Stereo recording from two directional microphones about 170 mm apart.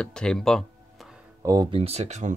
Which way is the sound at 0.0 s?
5° left (ahead or behind).